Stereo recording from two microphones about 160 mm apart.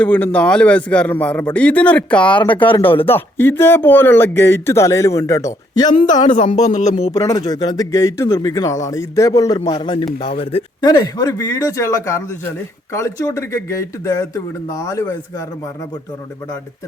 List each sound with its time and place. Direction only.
0.0 s speech: 10° left (ahead or behind)
2.3 s speech: 30° left (ahead or behind)
3.2 s speech: 15° left (ahead or behind)
6.6 s speech: 50° left (ahead or behind)
7.1 s speech: 20° left (ahead or behind); by 10.8 s 35° left (ahead or behind)
10.8 s speech: 25° left (ahead or behind)